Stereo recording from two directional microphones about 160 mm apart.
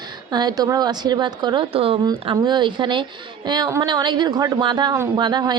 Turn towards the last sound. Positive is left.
turn(degrees=-25)  # may be behind; listen again after turning